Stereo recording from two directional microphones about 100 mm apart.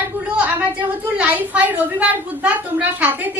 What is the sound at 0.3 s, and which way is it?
A woman's voice, 15° right (ahead or behind).